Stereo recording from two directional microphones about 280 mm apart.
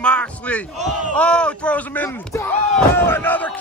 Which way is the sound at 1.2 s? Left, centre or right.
Centre.